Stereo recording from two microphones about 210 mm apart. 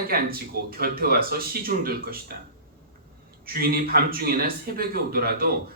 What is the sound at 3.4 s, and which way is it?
A man's voice, 45° right (ahead or behind).